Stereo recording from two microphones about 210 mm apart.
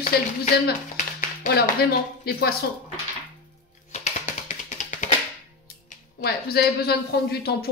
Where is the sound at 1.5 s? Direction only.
50° left (ahead or behind).